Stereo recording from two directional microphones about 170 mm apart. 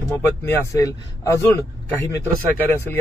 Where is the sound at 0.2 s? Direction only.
15° left (ahead or behind).